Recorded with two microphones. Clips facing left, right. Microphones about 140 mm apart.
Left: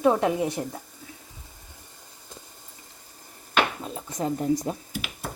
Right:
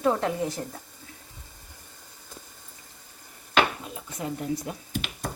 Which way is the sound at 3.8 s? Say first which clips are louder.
Left 5 dB; 35° left (ahead or behind).